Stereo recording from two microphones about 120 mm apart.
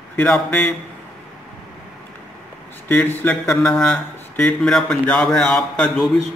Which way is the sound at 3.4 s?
5° left (ahead or behind).